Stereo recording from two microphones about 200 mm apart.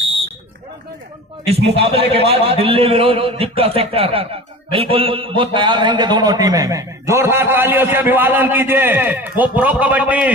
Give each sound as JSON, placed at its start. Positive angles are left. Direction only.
{"t": 1.7, "sound": "a man's voice", "side_deg": -30}